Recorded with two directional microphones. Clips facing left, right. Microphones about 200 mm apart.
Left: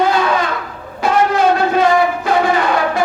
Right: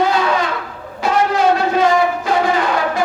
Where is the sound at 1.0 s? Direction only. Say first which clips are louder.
Left 1 dB; 55° left (ahead or behind).